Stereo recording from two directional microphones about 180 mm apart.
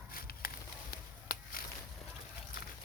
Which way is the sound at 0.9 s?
60° left (ahead or behind).